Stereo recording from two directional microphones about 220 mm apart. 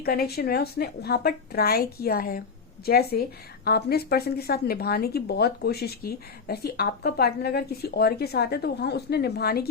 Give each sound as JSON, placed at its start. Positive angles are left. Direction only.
{"t": 0.0, "sound": "a woman's voice", "side_deg": 45}